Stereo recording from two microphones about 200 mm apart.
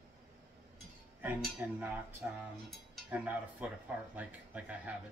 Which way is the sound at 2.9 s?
5° right (ahead or behind).